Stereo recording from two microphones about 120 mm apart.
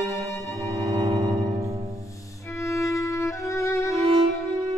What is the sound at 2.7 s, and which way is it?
Music, 25° left (ahead or behind).